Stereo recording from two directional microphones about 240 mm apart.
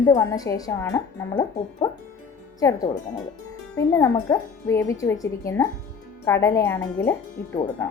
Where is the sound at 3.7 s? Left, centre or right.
Centre.